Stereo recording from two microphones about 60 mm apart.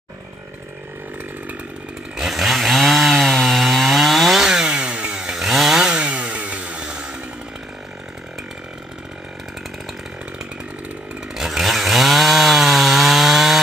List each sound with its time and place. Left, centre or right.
2.1 s chainsaw: centre
5.9 s chainsaw: centre
11.3 s chainsaw: centre